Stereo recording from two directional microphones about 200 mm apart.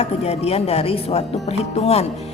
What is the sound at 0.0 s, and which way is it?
Speech, 30° left (ahead or behind).